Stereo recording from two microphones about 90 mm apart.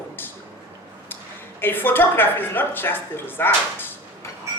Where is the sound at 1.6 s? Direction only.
20° left (ahead or behind).